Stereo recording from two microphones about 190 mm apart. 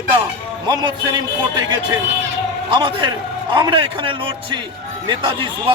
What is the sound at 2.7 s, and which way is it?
Speech, 25° right (ahead or behind).